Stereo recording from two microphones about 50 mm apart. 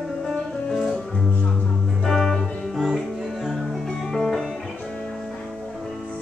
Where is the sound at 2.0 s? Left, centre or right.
Centre.